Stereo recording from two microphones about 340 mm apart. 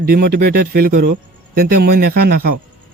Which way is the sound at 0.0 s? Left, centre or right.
Right.